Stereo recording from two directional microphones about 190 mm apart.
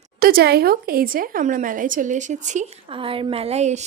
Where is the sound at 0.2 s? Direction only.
50° right (ahead or behind).